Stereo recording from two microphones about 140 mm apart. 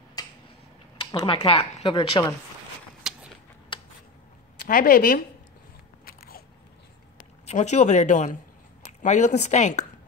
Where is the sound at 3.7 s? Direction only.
35° left (ahead or behind).